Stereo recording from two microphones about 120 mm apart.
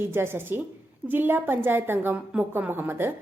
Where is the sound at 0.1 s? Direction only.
20° right (ahead or behind).